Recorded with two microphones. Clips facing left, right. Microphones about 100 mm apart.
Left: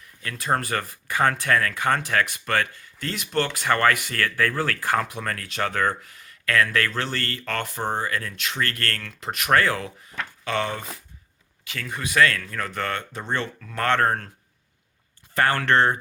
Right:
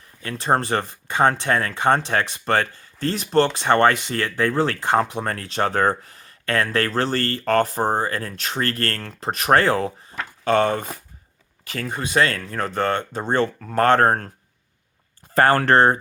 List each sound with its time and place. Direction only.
0.2 s speech: 30° right (ahead or behind)
15.4 s speech: 40° right (ahead or behind)